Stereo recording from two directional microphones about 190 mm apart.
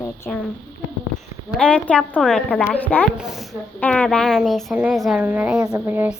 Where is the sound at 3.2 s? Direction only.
Centre (ahead or behind).